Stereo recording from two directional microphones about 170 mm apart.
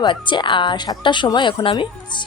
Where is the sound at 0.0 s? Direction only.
25° left (ahead or behind).